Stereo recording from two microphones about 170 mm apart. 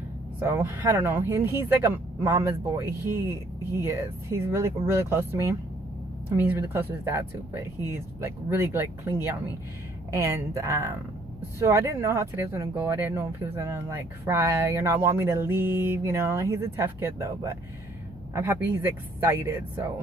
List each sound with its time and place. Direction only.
0.4 s speech: 15° right (ahead or behind)
8.5 s speech: 15° right (ahead or behind)
10.1 s speech: 15° right (ahead or behind)
19.1 s speech: 10° right (ahead or behind)